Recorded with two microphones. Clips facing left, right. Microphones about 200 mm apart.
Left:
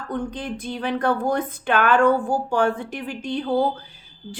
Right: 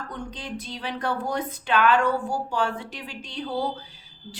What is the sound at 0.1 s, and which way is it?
A woman's voice, 55° left (ahead or behind).